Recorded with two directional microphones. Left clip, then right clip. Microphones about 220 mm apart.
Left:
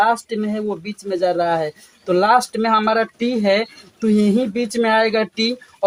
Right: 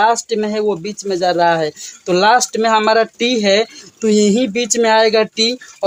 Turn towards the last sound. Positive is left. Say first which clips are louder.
# right 5 dB
turn(degrees=-40)  # may be behind; listen again after turning